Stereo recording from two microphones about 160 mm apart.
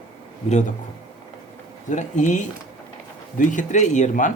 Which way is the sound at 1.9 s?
50° left (ahead or behind).